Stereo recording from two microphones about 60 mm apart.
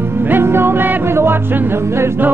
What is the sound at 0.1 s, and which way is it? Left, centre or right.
Music, right.